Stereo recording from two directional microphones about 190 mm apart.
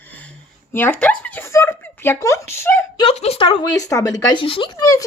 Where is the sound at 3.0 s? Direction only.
30° left (ahead or behind).